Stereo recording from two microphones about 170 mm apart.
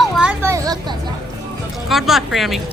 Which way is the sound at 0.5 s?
20° right (ahead or behind).